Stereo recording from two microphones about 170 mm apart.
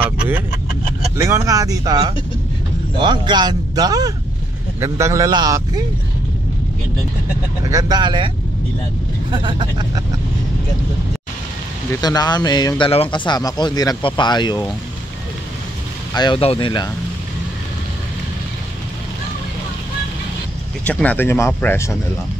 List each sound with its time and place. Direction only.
1.1 s a man's voice: 15° right (ahead or behind)
7.7 s a man's voice: 25° right (ahead or behind)
9.3 s a man's voice: 25° right (ahead or behind)
12.0 s speech: 20° left (ahead or behind)
16.2 s speech: 30° left (ahead or behind)
20.8 s speech: 10° left (ahead or behind)